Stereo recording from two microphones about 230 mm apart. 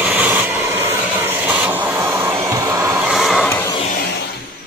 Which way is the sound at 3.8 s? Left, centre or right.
Left.